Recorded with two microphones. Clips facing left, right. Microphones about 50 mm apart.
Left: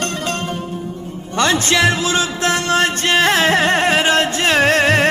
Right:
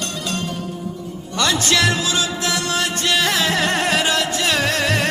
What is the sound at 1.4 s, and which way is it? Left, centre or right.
Music, left.